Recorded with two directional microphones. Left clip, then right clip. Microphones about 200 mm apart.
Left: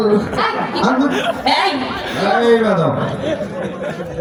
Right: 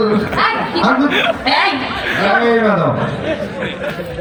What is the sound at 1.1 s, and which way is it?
Speech, 30° right (ahead or behind).